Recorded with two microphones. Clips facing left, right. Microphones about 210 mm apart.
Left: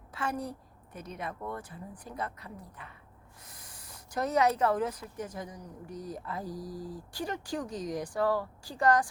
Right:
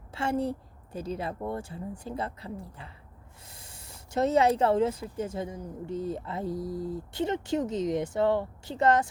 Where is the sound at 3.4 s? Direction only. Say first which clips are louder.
Right 2 dB; 25° right (ahead or behind).